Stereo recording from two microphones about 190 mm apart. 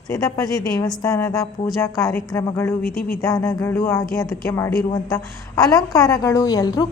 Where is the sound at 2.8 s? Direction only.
50° left (ahead or behind).